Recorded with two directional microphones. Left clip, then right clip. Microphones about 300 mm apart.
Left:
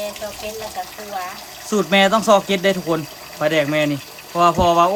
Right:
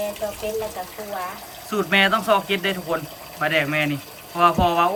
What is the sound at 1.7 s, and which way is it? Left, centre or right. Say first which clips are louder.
A man's voice: left 3 dB; centre.